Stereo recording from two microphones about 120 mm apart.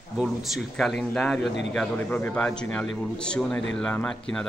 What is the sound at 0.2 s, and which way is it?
A man's voice, centre (ahead or behind).